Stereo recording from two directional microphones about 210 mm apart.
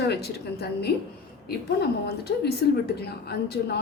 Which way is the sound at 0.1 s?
50° left (ahead or behind).